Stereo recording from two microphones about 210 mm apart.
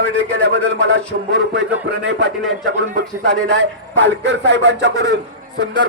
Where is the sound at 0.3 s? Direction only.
60° right (ahead or behind).